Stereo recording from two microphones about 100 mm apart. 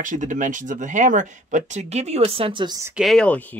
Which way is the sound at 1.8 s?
90° right.